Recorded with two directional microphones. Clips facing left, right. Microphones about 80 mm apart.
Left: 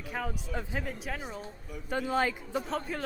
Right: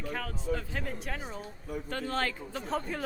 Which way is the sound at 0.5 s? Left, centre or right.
Left.